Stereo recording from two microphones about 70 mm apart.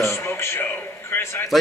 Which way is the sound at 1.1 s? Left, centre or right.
Left.